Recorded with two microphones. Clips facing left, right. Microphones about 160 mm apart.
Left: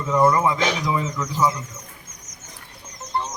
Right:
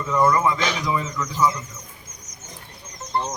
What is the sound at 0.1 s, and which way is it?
A man's voice, 20° left (ahead or behind).